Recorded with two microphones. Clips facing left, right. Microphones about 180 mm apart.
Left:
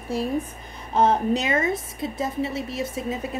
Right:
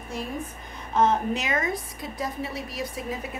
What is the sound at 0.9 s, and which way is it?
A woman's voice, 35° left (ahead or behind).